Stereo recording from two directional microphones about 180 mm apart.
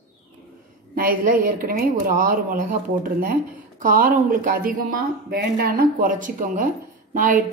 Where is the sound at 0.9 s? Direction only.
50° right (ahead or behind).